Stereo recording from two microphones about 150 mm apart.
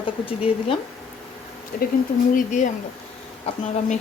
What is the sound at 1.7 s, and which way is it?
Speech, 70° left (ahead or behind).